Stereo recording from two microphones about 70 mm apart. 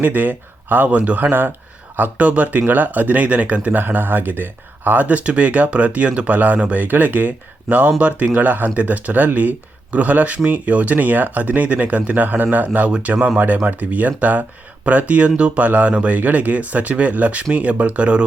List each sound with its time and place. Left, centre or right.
0.0 s speech: right
2.0 s speech: centre